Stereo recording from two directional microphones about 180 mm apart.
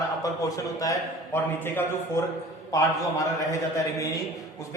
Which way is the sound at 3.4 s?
20° left (ahead or behind).